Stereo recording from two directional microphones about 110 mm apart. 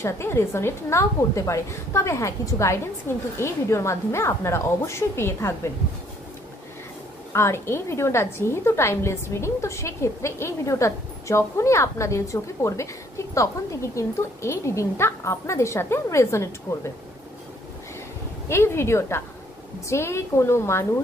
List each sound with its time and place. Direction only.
0.0 s a woman's voice: 25° left (ahead or behind)
7.3 s a woman's voice: 25° left (ahead or behind)
18.5 s a woman's voice: 25° left (ahead or behind)